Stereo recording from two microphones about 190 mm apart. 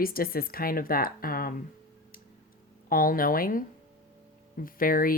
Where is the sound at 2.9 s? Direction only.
50° left (ahead or behind).